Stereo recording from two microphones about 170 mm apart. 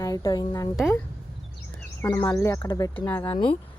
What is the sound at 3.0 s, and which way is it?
Speech, 10° left (ahead or behind).